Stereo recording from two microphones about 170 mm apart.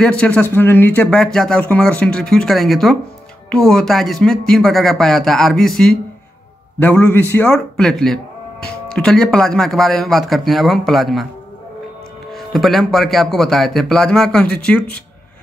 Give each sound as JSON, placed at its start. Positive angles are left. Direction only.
{"t": 0.0, "sound": "speech", "side_deg": 5}
{"t": 12.3, "sound": "speech", "side_deg": 0}